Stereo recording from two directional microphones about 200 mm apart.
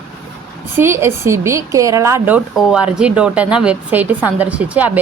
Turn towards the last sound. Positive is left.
turn(degrees=-10)  # may be behind; listen again after turning